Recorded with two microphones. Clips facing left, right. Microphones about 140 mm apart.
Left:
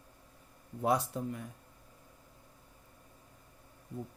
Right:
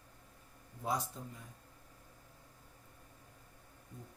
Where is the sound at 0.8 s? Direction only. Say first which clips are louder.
Left 7 dB; 65° left (ahead or behind).